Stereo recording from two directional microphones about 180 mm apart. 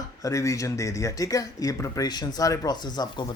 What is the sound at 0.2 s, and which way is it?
Speech, 20° left (ahead or behind).